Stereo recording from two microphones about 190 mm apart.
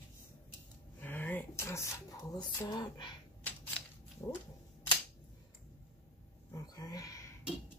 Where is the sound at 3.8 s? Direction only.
5° left (ahead or behind).